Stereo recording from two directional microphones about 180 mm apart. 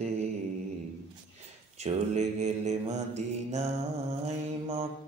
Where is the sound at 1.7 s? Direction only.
40° right (ahead or behind).